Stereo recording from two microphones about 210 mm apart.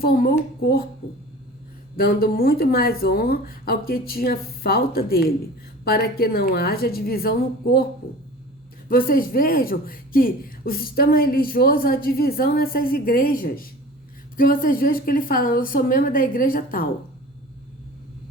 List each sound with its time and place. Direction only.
0.0 s speech: 45° left (ahead or behind)
2.0 s speech: 45° left (ahead or behind)
8.9 s speech: 45° left (ahead or behind)